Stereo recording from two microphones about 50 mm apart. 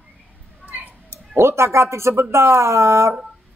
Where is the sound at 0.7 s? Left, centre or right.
Right.